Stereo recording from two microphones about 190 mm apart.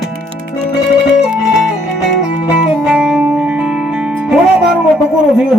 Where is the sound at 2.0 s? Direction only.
5° right (ahead or behind).